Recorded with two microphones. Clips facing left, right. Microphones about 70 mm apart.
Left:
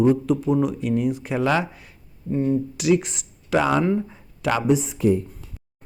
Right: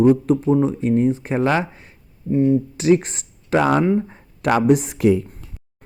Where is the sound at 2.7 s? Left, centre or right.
Right.